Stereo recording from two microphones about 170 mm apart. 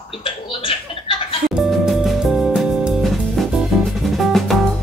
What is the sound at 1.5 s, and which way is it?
Music, centre (ahead or behind).